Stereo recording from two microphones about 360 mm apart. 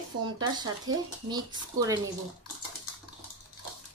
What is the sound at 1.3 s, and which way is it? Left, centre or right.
Speech, centre.